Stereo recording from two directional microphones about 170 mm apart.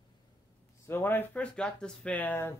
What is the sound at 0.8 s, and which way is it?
Speech, 10° left (ahead or behind).